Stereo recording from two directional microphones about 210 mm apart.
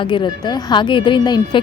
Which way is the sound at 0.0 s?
20° left (ahead or behind).